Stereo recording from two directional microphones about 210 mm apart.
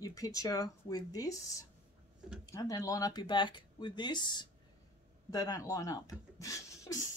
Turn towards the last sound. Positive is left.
turn(degrees=15)  # may be behind; listen again after turning